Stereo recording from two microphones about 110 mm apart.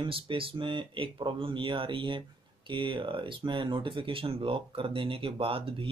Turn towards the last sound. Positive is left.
turn(degrees=-55)  # may be behind; listen again after turning